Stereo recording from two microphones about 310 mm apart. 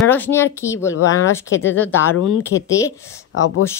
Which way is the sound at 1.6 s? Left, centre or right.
Centre.